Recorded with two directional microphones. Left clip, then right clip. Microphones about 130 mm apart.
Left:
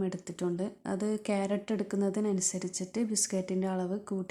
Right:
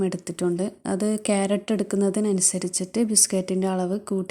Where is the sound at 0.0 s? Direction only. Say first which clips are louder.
Right 9 dB; 35° right (ahead or behind).